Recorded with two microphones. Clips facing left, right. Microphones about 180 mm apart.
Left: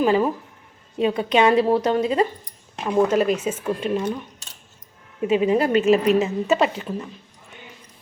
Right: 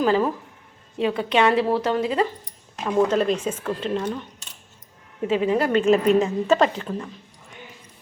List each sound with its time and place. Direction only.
0.0 s a woman's voice: 10° left (ahead or behind)
3.1 s a woman's voice: 5° left (ahead or behind)
5.3 s a woman's voice: 15° left (ahead or behind)